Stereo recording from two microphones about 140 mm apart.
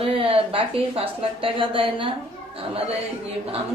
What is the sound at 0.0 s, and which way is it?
A woman's voice, 40° right (ahead or behind).